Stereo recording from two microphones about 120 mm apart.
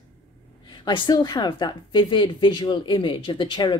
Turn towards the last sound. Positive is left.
turn(degrees=40)  # may be behind; listen again after turning